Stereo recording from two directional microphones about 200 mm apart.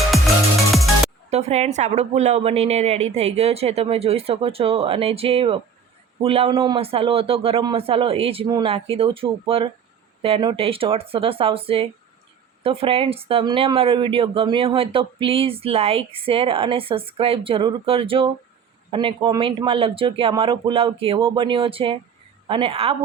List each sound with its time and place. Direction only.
0.7 s music: centre (ahead or behind)
1.3 s a woman's voice: 30° right (ahead or behind)